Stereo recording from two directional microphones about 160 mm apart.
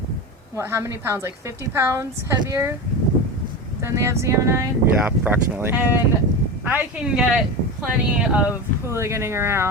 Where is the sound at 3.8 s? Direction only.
15° right (ahead or behind).